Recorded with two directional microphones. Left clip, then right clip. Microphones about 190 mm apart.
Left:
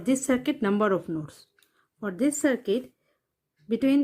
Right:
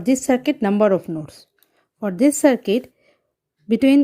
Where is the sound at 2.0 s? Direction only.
35° right (ahead or behind).